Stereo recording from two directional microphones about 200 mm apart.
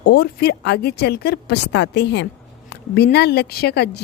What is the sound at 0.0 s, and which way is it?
A woman's voice, 55° left (ahead or behind).